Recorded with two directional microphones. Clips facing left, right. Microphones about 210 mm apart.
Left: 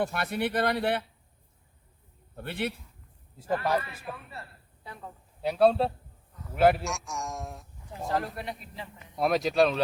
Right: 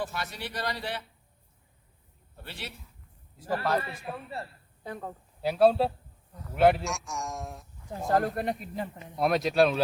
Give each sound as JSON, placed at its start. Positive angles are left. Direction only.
{"t": 0.0, "sound": "a man's voice", "side_deg": 60}
{"t": 2.3, "sound": "a man's voice", "side_deg": 55}
{"t": 3.5, "sound": "a man's voice", "side_deg": 15}
{"t": 4.1, "sound": "a man's voice", "side_deg": -30}
{"t": 4.8, "sound": "a woman's voice", "side_deg": -45}
{"t": 5.4, "sound": "a man's voice", "side_deg": 0}
{"t": 8.1, "sound": "speech", "side_deg": -50}
{"t": 9.1, "sound": "a man's voice", "side_deg": 0}